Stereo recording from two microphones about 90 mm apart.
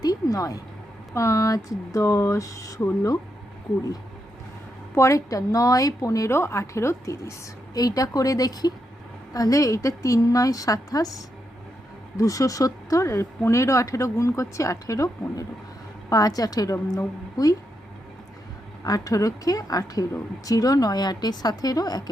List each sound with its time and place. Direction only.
0.0 s a sound: 45° left (ahead or behind)
1.1 s a woman's voice: 35° left (ahead or behind)
4.9 s a woman's voice: 35° left (ahead or behind)
12.1 s a woman's voice: 40° left (ahead or behind)
18.9 s speech: 40° left (ahead or behind)